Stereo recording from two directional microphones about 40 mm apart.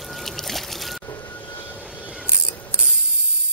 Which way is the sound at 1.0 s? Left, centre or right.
Left.